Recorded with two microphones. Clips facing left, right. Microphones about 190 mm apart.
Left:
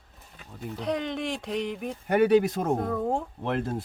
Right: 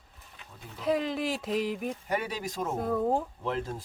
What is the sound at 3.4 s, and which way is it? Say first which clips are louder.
Speech: left 3 dB; 60° left (ahead or behind).